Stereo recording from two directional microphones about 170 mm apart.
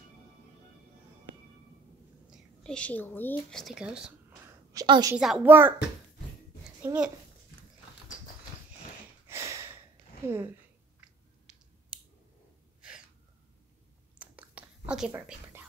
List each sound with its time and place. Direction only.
2.3 s speech: 5° left (ahead or behind)
3.6 s speech: 5° right (ahead or behind)
4.7 s a woman's voice: 25° right (ahead or behind)
5.1 s speech: 5° right (ahead or behind)
6.8 s speech: 15° right (ahead or behind)
9.3 s a sound: 15° right (ahead or behind)
10.2 s speech: 15° right (ahead or behind)
11.5 s finger snapping: 5° right (ahead or behind)
14.2 s whispering: 10° right (ahead or behind)